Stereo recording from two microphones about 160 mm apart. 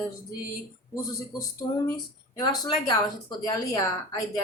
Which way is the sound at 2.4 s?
30° left (ahead or behind).